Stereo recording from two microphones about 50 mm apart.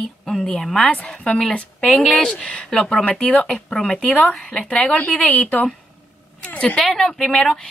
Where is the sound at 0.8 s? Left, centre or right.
Left.